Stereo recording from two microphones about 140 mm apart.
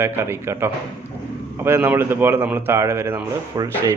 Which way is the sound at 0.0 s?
20° right (ahead or behind).